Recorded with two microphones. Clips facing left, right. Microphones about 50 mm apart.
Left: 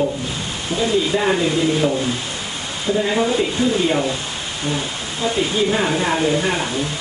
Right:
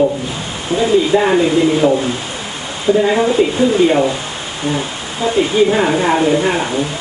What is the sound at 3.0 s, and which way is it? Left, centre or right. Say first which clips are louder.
Speech: right 6 dB; centre.